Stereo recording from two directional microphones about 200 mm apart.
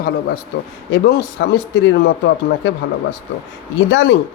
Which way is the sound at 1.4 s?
65° left (ahead or behind).